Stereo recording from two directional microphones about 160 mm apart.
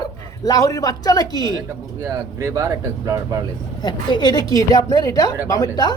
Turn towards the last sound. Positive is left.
turn(degrees=25)  # may be behind; listen again after turning